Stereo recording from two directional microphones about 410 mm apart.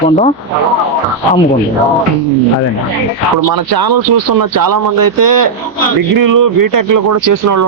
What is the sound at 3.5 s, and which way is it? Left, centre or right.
Speech, right.